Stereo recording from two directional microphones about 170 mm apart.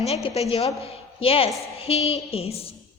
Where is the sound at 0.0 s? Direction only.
35° left (ahead or behind).